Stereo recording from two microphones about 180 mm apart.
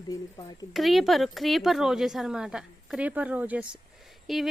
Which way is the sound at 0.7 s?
Centre (ahead or behind).